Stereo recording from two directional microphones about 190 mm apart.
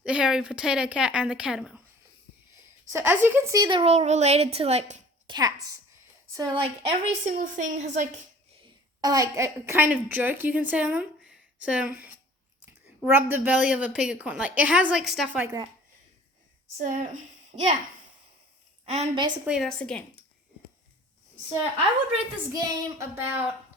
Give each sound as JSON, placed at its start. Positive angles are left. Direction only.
{"t": 0.0, "sound": "a woman's voice", "side_deg": -5}
{"t": 2.9, "sound": "a woman's voice", "side_deg": -10}
{"t": 3.9, "sound": "a woman's voice", "side_deg": -35}
{"t": 5.3, "sound": "a woman's voice", "side_deg": -20}
{"t": 9.0, "sound": "a woman's voice", "side_deg": -20}
{"t": 16.7, "sound": "a woman's voice", "side_deg": -40}
{"t": 18.9, "sound": "a woman's voice", "side_deg": -30}
{"t": 19.5, "sound": "a woman's voice", "side_deg": 0}
{"t": 22.5, "sound": "a woman's voice", "side_deg": -20}